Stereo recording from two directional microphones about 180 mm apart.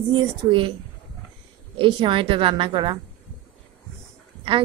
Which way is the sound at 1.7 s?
30° right (ahead or behind).